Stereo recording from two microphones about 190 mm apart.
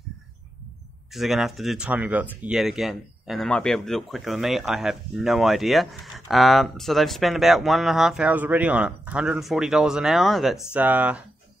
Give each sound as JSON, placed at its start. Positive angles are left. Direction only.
{"t": 1.1, "sound": "speech", "side_deg": 0}